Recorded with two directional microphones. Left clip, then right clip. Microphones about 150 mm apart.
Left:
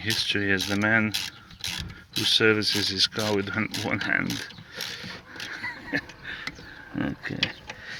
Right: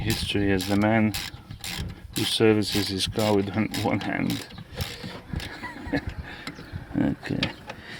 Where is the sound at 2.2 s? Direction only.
15° right (ahead or behind).